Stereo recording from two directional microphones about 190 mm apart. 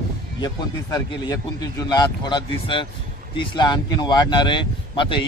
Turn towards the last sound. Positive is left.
turn(degrees=25)  # may be behind; listen again after turning